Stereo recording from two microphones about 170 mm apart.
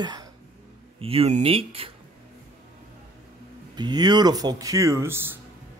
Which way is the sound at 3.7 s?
25° right (ahead or behind).